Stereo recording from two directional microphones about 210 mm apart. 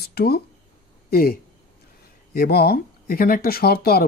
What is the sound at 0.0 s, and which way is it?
Speech, 50° left (ahead or behind).